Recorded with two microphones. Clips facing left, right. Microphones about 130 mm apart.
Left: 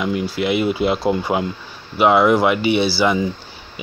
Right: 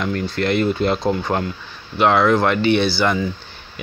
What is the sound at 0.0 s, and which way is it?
Speech, 5° left (ahead or behind).